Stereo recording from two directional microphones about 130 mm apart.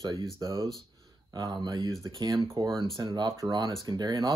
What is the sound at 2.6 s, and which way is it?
Speech, 40° right (ahead or behind).